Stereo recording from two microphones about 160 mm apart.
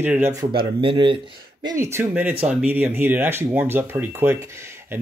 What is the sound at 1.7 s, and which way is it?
Speech, 20° right (ahead or behind).